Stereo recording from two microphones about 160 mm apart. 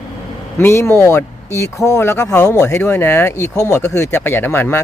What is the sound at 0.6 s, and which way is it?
Speech, 15° left (ahead or behind).